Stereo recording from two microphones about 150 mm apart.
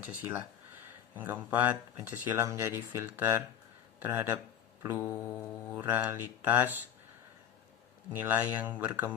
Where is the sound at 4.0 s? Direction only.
15° right (ahead or behind).